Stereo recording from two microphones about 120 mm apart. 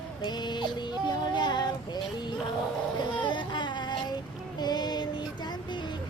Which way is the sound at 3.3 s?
40° left (ahead or behind).